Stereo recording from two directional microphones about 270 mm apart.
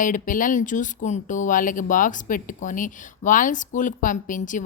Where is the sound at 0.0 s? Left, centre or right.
Left.